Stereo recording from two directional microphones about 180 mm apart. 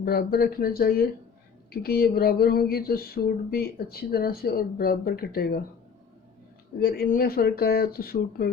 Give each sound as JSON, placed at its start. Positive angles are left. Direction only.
{"t": 0.0, "sound": "speech", "side_deg": 60}
{"t": 6.7, "sound": "speech", "side_deg": 60}